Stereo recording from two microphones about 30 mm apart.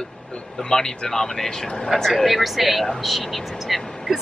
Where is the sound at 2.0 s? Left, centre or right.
Centre.